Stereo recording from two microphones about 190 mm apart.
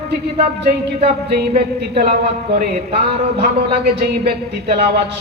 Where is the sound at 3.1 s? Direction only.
60° right (ahead or behind).